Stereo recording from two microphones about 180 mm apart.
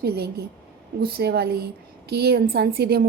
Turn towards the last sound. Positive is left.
turn(degrees=-60)  # may be behind; listen again after turning